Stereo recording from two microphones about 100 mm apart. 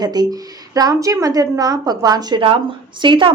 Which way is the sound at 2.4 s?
65° right (ahead or behind).